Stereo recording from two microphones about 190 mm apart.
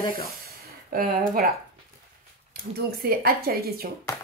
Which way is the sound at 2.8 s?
55° right (ahead or behind).